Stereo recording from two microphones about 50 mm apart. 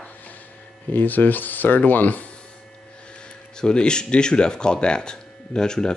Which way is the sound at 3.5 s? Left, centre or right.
Centre.